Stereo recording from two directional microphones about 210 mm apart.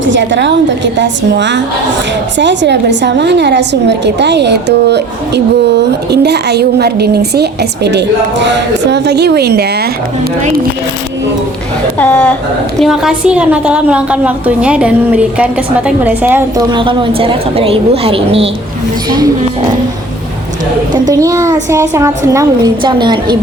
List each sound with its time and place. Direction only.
0.0 s a woman's voice: 60° right (ahead or behind)
11.9 s a woman's voice: 5° left (ahead or behind); by 16.6 s 10° right (ahead or behind)
16.7 s a woman's voice: 25° right (ahead or behind)
21.1 s a child's voice: 15° right (ahead or behind)